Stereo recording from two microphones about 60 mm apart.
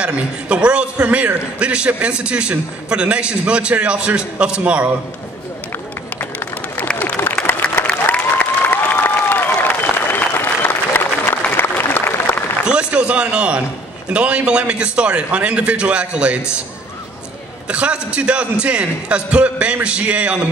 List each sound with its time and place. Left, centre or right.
0.0 s a man's voice: centre
7.9 s applause: left
12.6 s a sound: centre
14.1 s a man's voice: centre
17.6 s a man's voice: centre